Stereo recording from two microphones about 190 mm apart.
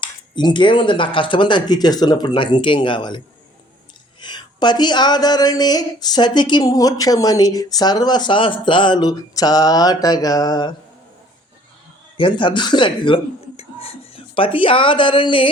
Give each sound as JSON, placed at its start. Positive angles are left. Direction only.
{"t": 0.0, "sound": "a woman's voice", "side_deg": 25}
{"t": 4.2, "sound": "a woman's voice", "side_deg": 25}
{"t": 12.1, "sound": "speech", "side_deg": 25}